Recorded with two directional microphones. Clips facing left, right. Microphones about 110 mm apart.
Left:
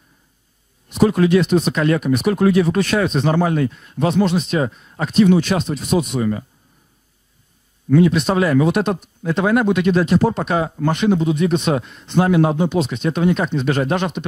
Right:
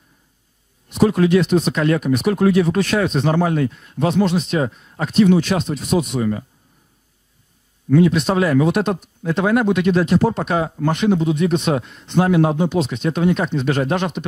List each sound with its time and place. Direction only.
0.9 s speech: 15° left (ahead or behind)
7.9 s speech: 15° left (ahead or behind)